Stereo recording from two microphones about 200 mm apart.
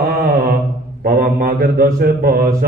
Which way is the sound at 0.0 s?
50° right (ahead or behind).